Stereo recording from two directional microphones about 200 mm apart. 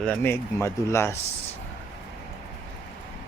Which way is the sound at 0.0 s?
10° left (ahead or behind).